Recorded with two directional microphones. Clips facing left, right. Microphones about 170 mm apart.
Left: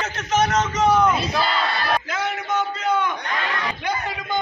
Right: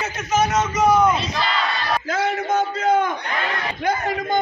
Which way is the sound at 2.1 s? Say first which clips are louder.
Right 4 dB; 45° right (ahead or behind).